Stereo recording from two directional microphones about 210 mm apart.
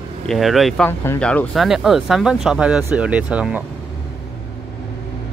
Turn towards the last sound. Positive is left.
turn(degrees=-5)  # may be behind; listen again after turning